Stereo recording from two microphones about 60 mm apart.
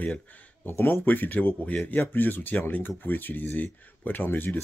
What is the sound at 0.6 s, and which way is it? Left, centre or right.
Speech, left.